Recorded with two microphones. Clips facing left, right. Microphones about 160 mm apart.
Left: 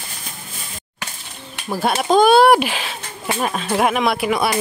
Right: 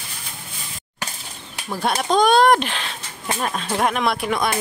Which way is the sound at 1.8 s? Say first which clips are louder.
Left 4 dB; 5° left (ahead or behind).